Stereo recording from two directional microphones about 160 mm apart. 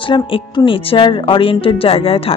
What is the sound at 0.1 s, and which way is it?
Speech, 30° left (ahead or behind).